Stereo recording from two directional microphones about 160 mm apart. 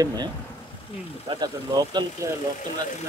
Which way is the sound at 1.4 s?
25° right (ahead or behind).